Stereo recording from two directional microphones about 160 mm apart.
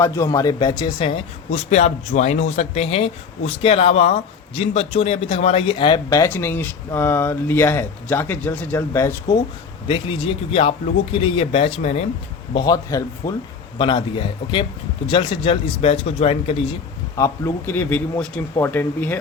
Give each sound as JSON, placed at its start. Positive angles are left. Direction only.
{"t": 0.0, "sound": "speech", "side_deg": 20}
{"t": 6.1, "sound": "speech", "side_deg": 15}
{"t": 9.8, "sound": "speech", "side_deg": 35}
{"t": 12.5, "sound": "speech", "side_deg": 25}
{"t": 17.2, "sound": "speech", "side_deg": 20}